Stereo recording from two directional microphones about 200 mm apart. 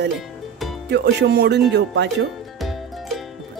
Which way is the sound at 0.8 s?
55° right (ahead or behind).